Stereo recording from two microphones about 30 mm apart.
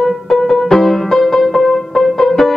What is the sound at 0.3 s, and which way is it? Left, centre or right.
Music, centre.